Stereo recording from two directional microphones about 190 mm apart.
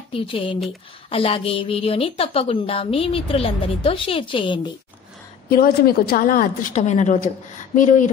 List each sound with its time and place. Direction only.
0.1 s a woman's voice: 30° left (ahead or behind)
5.5 s a woman's voice: 50° left (ahead or behind)